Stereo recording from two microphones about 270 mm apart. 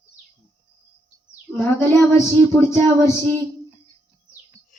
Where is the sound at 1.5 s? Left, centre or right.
Centre.